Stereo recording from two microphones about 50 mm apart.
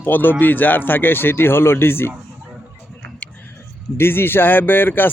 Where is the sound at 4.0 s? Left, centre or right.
Left.